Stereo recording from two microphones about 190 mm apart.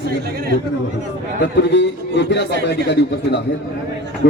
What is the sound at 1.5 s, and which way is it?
A man's voice, 65° left (ahead or behind).